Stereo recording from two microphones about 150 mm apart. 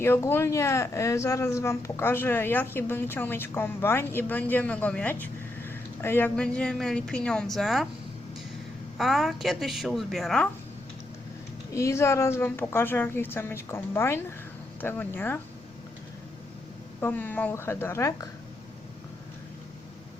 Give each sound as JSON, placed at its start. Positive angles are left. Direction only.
{"t": 0.0, "sound": "speech", "side_deg": 15}
{"t": 9.0, "sound": "a woman's voice", "side_deg": 0}
{"t": 11.7, "sound": "speech", "side_deg": 20}
{"t": 17.0, "sound": "speech", "side_deg": 10}